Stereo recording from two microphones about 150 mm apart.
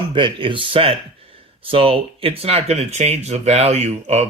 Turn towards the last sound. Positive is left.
turn(degrees=-45)  # may be behind; listen again after turning